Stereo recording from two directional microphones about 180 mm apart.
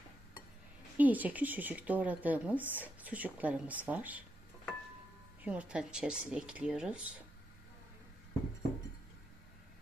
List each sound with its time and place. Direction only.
0.9 s speech: 10° right (ahead or behind)
5.4 s speech: 10° right (ahead or behind)